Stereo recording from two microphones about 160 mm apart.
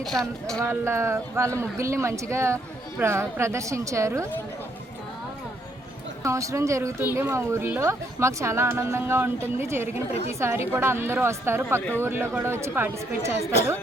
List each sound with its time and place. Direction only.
0.0 s speech: centre (ahead or behind)
0.6 s speech: 15° right (ahead or behind)
6.2 s speech: 20° right (ahead or behind)